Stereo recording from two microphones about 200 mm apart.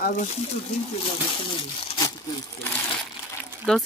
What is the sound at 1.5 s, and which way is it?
Crumpling, 25° left (ahead or behind).